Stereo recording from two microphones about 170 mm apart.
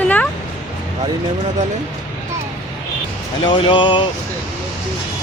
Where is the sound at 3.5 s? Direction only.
30° left (ahead or behind).